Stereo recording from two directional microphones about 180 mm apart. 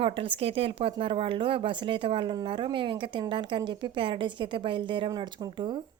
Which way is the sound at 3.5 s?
30° right (ahead or behind).